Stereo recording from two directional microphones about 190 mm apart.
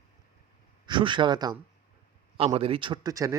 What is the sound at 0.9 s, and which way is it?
A man's voice, 25° right (ahead or behind).